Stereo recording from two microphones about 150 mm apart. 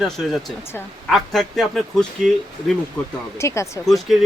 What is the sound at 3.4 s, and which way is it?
Speech, 20° left (ahead or behind).